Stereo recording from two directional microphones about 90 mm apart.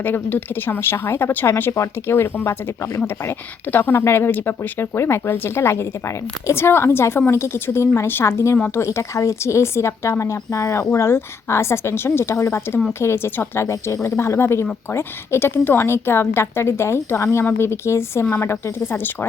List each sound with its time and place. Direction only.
0.0 s a woman's voice: 20° left (ahead or behind)
13.7 s a woman's voice: 35° left (ahead or behind)